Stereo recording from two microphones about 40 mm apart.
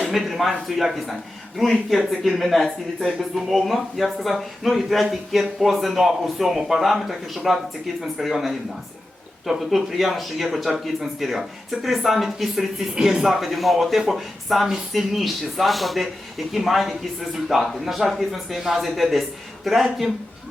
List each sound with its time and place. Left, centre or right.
0.2 s speech: centre
9.7 s speech: centre